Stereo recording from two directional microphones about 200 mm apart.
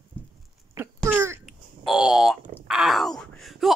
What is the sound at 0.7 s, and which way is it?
Wail, 10° right (ahead or behind).